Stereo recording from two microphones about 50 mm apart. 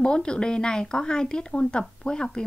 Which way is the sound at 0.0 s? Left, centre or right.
Centre.